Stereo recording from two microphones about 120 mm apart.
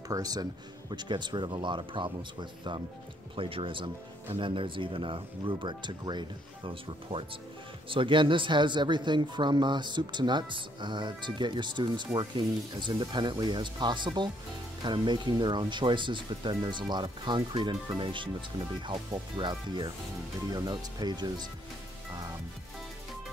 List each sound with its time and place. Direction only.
0.1 s speech: 30° right (ahead or behind)
3.3 s speech: 50° right (ahead or behind)